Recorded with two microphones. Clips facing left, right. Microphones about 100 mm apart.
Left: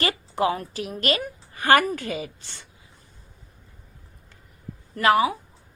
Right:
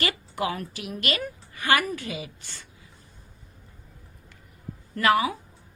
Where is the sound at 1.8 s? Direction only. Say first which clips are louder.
Left 4 dB; 45° left (ahead or behind).